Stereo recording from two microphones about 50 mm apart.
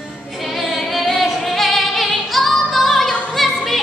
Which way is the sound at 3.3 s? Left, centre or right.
Centre.